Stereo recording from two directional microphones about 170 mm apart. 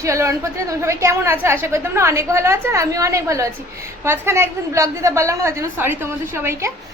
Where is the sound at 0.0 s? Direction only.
15° right (ahead or behind).